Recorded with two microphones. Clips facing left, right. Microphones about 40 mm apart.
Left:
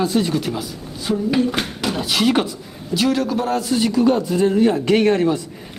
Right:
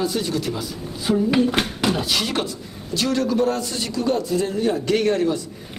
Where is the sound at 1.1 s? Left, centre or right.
Centre.